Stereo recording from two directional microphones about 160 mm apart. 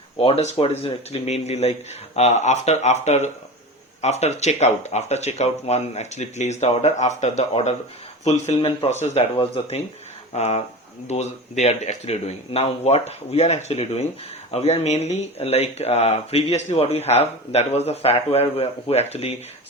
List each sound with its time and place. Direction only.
0.2 s speech: 35° left (ahead or behind)